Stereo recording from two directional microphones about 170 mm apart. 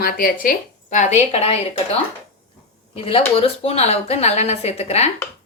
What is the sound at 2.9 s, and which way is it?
Speech, 35° left (ahead or behind).